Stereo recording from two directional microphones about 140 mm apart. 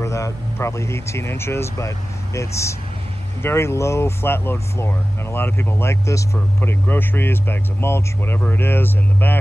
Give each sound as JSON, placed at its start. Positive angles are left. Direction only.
{"t": 0.0, "sound": "speech", "side_deg": 20}